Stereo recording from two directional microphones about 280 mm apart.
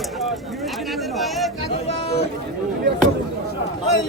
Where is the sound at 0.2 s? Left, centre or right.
Centre.